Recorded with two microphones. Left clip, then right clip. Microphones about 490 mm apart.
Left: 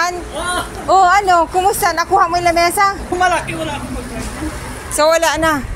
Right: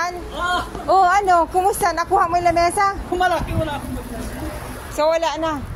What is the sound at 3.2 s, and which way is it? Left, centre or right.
Speech, right.